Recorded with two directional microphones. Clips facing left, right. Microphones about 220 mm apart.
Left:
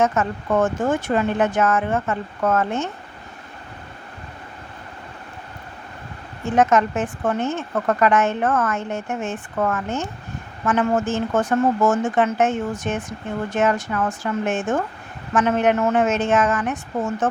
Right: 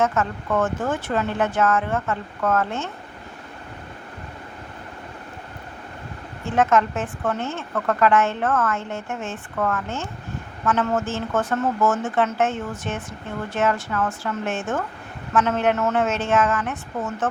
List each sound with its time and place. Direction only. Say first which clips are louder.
0.0 s speech: left 2 dB; 20° left (ahead or behind)
6.4 s speech: left 2 dB; 15° left (ahead or behind)